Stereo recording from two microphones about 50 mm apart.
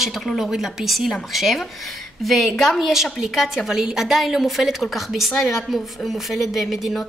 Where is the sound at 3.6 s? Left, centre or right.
Centre.